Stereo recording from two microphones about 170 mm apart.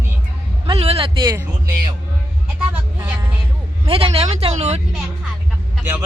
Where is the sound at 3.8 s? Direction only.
35° right (ahead or behind).